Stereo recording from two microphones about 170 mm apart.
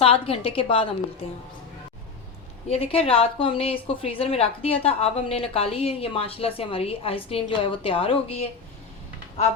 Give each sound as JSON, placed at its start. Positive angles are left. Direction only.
{"t": 0.0, "sound": "a woman's voice", "side_deg": 35}
{"t": 2.6, "sound": "a woman's voice", "side_deg": 35}